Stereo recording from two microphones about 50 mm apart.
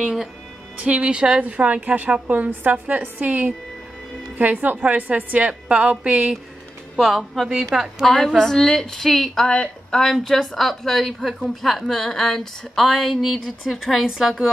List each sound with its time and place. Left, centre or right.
0.8 s a woman's voice: right
7.0 s speech: centre
8.4 s a woman's voice: centre
9.5 s speech: centre
10.0 s speech: centre